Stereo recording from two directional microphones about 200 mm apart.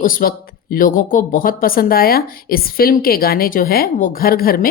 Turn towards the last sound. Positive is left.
turn(degrees=45)  # may be behind; listen again after turning